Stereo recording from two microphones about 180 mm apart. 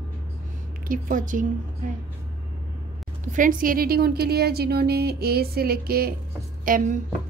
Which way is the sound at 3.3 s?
50° right (ahead or behind).